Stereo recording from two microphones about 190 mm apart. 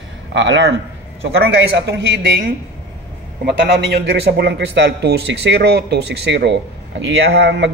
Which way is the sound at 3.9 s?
60° right (ahead or behind).